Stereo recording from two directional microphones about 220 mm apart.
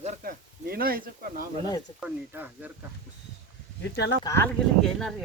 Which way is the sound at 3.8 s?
50° left (ahead or behind).